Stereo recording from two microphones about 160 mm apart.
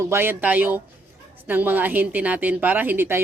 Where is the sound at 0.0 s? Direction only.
15° right (ahead or behind).